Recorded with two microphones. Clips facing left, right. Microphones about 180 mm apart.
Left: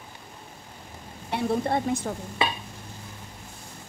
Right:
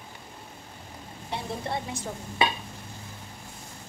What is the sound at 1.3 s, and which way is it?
Speech, 55° left (ahead or behind).